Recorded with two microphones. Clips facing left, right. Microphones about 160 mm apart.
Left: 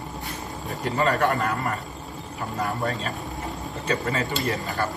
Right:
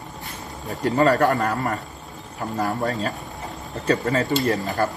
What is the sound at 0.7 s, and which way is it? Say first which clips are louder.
A man's voice: right 6 dB; 40° right (ahead or behind).